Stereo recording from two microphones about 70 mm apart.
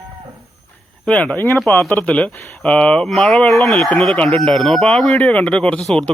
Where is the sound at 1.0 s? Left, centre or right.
Centre.